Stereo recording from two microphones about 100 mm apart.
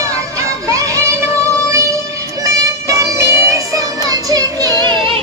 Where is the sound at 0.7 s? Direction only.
30° right (ahead or behind).